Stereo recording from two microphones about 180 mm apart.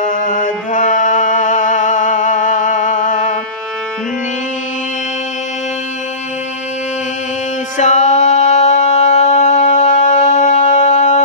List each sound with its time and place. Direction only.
0.0 s music: 45° left (ahead or behind)
7.7 s music: 40° left (ahead or behind)